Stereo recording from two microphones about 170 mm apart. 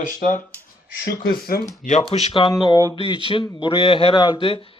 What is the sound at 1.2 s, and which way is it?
Speech, 60° left (ahead or behind).